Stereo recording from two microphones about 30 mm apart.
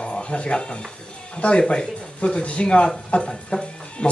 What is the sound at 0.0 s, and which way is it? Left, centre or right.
Speech, left.